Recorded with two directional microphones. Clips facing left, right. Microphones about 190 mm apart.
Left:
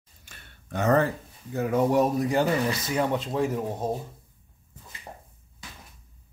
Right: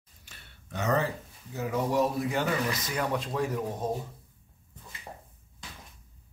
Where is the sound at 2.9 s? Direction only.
25° left (ahead or behind).